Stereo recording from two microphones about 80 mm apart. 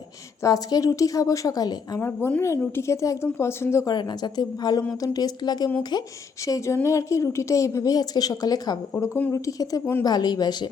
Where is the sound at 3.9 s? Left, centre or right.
Left.